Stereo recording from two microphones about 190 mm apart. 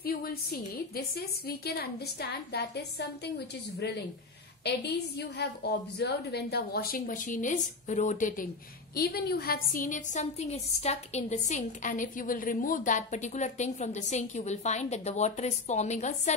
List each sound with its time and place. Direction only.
0.0 s a woman's voice: 55° left (ahead or behind)
8.9 s a woman's voice: 55° left (ahead or behind); by 16.3 s 35° left (ahead or behind)